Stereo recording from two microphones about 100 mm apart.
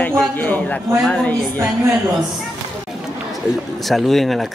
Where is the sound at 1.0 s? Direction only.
5° left (ahead or behind).